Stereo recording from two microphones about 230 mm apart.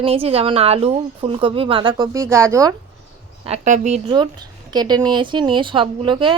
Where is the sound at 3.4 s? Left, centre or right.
Right.